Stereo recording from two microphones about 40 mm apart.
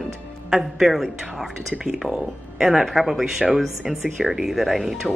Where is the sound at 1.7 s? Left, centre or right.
Centre.